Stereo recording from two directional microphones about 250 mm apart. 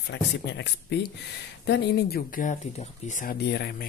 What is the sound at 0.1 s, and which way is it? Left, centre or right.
Speech, left.